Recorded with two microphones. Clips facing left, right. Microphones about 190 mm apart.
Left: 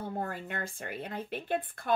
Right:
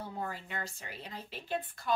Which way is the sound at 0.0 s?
55° left (ahead or behind).